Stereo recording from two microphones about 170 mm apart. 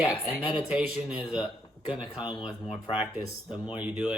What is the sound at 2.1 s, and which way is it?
Speech, 25° left (ahead or behind).